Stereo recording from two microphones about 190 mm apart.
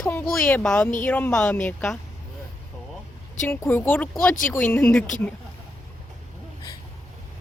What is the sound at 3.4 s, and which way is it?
A woman's voice, 10° left (ahead or behind).